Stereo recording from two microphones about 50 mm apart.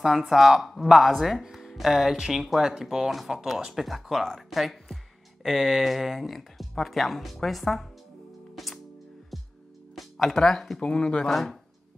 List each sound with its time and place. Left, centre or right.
0.0 s speech: centre
8.6 s music: centre
9.9 s speech: centre
10.8 s speech: centre
11.2 s speech: centre